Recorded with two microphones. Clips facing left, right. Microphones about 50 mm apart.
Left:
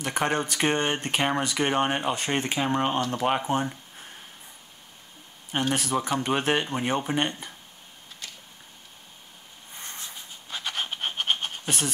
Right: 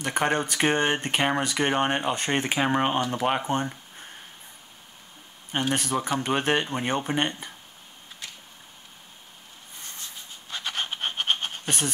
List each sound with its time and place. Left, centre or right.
0.0 s speech: centre
5.5 s speech: centre
9.8 s a sound: centre
10.1 s scratch: centre